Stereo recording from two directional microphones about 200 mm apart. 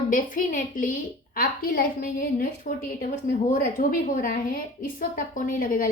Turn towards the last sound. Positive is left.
turn(degrees=45)  # may be behind; listen again after turning